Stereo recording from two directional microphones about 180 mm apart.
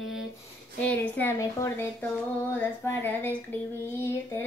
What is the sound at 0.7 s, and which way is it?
Child singing, 10° left (ahead or behind).